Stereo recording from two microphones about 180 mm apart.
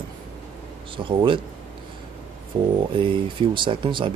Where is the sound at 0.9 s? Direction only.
30° right (ahead or behind).